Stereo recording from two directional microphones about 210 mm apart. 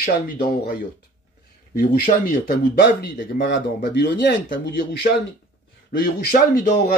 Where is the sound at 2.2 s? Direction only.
50° left (ahead or behind).